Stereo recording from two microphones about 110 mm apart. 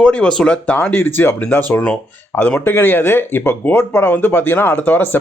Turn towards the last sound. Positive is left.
turn(degrees=15)  # may be behind; listen again after turning